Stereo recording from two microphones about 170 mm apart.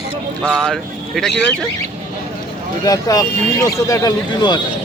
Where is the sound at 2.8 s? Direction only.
20° left (ahead or behind).